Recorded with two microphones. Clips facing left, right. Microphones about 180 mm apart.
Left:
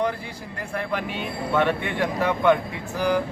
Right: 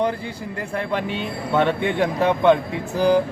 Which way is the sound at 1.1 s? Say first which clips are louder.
Right 1 dB; 25° right (ahead or behind).